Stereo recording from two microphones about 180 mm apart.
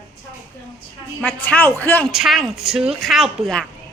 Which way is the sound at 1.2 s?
10° left (ahead or behind).